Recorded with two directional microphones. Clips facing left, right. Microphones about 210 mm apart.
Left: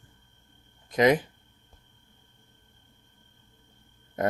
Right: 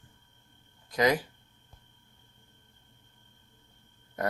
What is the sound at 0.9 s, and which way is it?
Speech, 20° left (ahead or behind).